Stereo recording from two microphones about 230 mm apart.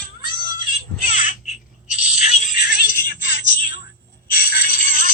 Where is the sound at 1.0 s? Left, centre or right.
Left.